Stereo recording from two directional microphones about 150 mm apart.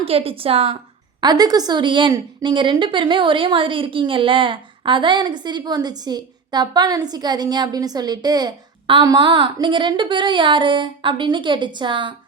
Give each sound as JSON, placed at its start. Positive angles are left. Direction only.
{"t": 0.0, "sound": "a woman's voice", "side_deg": -40}
{"t": 1.2, "sound": "a woman's voice", "side_deg": -25}